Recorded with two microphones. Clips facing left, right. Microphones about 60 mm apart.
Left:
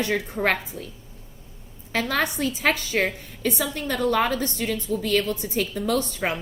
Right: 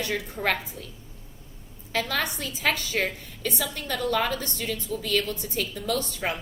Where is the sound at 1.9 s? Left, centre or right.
Left.